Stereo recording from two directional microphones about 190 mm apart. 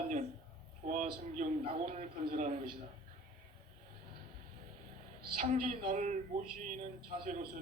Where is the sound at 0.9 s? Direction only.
40° right (ahead or behind).